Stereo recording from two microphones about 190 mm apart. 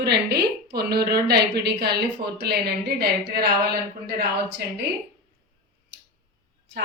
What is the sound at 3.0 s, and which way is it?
Speech, 55° right (ahead or behind).